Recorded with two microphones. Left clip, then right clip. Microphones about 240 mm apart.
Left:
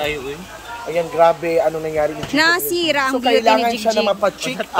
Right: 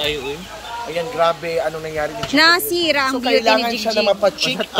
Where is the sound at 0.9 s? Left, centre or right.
Left.